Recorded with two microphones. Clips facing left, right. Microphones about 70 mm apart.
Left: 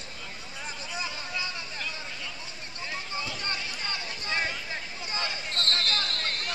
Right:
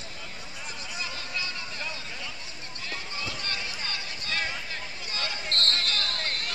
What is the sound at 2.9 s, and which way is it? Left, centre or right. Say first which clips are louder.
Run: left 1 dB; left.